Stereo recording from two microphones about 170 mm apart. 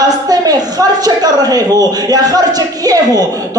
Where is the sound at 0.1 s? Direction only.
25° right (ahead or behind).